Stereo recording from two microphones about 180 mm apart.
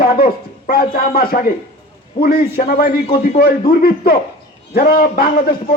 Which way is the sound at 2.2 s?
30° left (ahead or behind).